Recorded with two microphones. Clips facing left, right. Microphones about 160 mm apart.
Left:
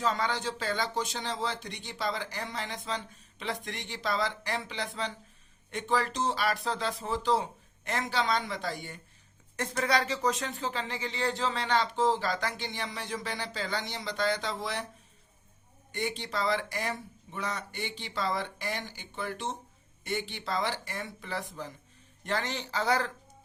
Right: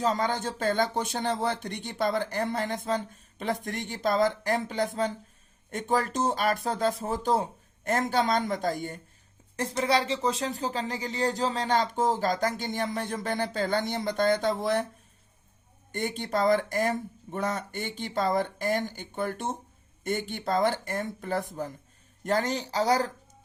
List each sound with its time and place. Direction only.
0.0 s speech: 40° right (ahead or behind)
9.6 s speech: 30° right (ahead or behind); by 14.8 s 50° right (ahead or behind)
15.9 s speech: 50° right (ahead or behind)